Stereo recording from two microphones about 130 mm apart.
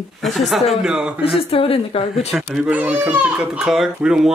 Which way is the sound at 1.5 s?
50° left (ahead or behind).